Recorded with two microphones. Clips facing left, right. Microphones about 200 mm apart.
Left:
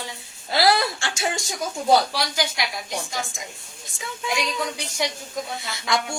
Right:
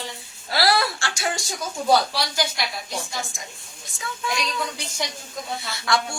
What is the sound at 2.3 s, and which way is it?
Speech, 15° left (ahead or behind).